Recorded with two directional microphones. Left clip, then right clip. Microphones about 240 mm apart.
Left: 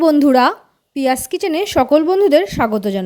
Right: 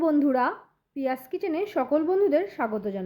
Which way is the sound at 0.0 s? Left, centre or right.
Left.